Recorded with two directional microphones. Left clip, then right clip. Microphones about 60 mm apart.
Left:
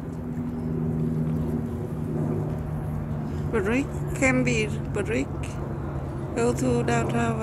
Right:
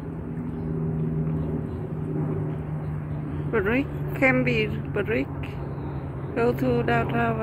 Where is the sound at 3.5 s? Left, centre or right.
Centre.